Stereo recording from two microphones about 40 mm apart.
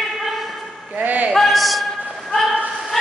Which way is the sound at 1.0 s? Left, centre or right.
Right.